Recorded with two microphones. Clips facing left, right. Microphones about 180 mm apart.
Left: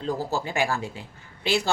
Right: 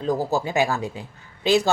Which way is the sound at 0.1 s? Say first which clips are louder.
Right 5 dB; 15° right (ahead or behind).